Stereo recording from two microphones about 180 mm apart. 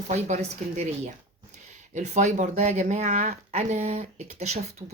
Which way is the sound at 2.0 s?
40° right (ahead or behind).